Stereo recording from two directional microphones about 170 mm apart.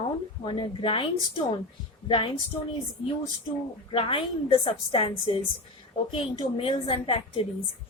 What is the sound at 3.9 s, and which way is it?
Speech, 30° left (ahead or behind).